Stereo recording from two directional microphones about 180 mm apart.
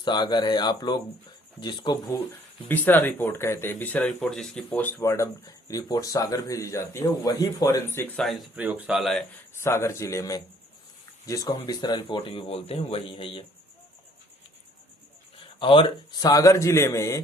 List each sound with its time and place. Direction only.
0.0 s speech: 25° left (ahead or behind)
2.6 s speech: 10° left (ahead or behind)
9.6 s speech: 15° left (ahead or behind)
15.5 s speech: 30° left (ahead or behind)